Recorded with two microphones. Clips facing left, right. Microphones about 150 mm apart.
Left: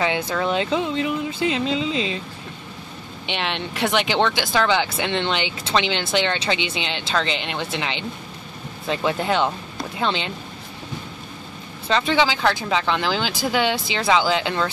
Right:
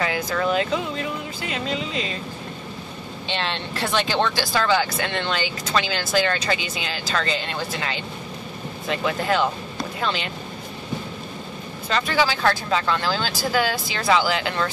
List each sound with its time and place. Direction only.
0.0 s speech: 25° left (ahead or behind)
3.3 s speech: 15° left (ahead or behind)
12.1 s speech: 20° left (ahead or behind)